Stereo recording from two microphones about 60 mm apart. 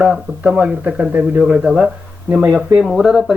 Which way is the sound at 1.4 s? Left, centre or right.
Centre.